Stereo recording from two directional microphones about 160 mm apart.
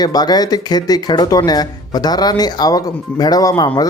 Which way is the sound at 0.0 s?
25° left (ahead or behind).